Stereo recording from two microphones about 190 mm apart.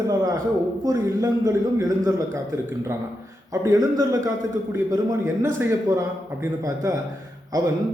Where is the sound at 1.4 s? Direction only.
20° right (ahead or behind).